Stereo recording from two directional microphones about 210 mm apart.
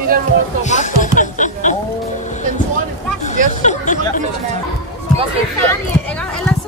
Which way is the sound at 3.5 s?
35° left (ahead or behind).